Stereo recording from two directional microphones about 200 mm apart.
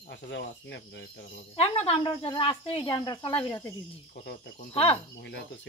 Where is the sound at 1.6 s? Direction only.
30° left (ahead or behind).